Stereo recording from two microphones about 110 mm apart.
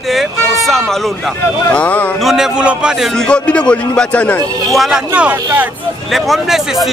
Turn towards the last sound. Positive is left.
turn(degrees=-5)  # may be behind; listen again after turning